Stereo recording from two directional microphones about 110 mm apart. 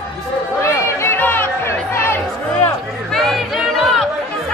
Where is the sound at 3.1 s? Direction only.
Centre (ahead or behind).